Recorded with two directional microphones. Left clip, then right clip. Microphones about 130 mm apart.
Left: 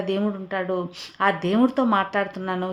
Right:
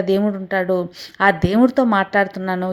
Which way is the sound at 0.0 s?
30° right (ahead or behind).